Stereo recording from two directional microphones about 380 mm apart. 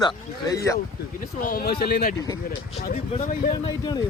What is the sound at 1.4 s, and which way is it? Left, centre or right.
Speech, left.